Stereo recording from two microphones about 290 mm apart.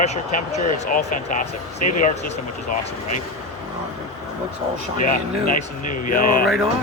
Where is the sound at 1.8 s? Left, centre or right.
Left.